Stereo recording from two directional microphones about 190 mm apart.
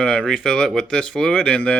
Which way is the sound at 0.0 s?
5° left (ahead or behind).